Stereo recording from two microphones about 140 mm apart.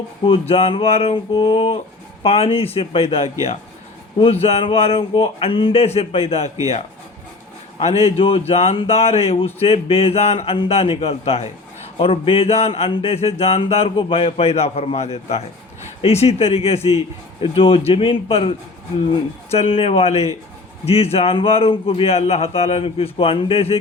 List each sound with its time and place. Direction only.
0.3 s speech: 50° left (ahead or behind)
7.8 s speech: 45° left (ahead or behind)